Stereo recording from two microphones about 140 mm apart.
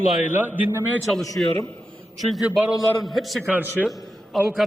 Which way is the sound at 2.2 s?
Centre (ahead or behind).